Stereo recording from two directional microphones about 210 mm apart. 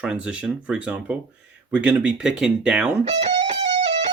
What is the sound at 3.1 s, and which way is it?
Music, 30° right (ahead or behind).